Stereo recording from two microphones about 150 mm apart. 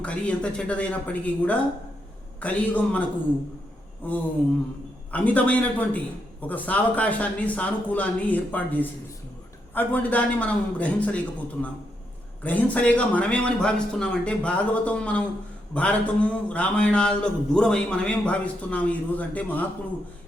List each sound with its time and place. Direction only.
0.0 s speech: 10° left (ahead or behind)